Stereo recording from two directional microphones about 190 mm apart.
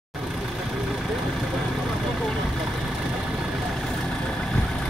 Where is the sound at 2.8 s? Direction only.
5° right (ahead or behind).